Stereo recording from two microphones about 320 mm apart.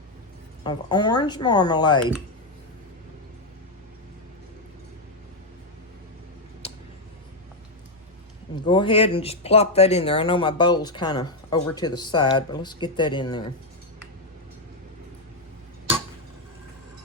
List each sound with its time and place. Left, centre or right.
0.6 s speech: centre
8.6 s speech: centre